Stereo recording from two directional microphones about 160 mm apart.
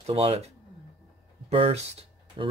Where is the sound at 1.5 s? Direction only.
40° right (ahead or behind).